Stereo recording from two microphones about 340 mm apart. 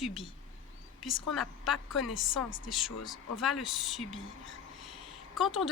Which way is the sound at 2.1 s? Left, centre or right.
Left.